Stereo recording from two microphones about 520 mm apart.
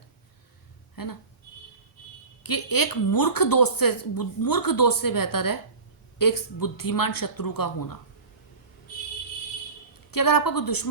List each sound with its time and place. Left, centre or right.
1.0 s speech: left
2.4 s a woman's voice: left
10.1 s a woman's voice: left